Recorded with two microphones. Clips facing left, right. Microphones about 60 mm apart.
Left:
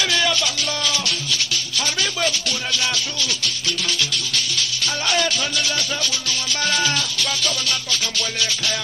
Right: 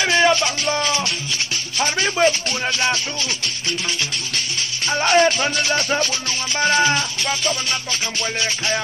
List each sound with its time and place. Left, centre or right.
0.0 s music: right
1.8 s speech: right
4.6 s music: right
5.4 s speech: right
6.6 s music: right